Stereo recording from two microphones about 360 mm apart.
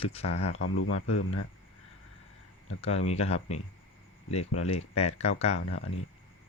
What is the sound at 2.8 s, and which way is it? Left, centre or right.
Speech, centre.